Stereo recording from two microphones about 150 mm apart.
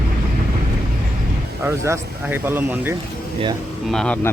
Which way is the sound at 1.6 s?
15° right (ahead or behind).